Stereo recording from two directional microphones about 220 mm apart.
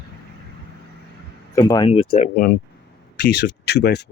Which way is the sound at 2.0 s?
35° left (ahead or behind).